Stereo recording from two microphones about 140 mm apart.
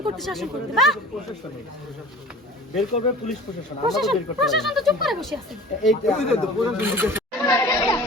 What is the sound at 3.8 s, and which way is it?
Speech, centre (ahead or behind).